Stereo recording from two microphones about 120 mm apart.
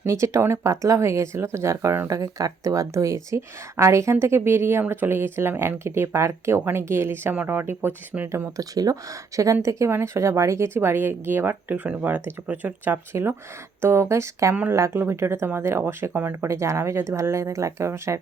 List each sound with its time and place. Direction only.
0.0 s speech: 25° right (ahead or behind)
14.5 s speech: 15° right (ahead or behind)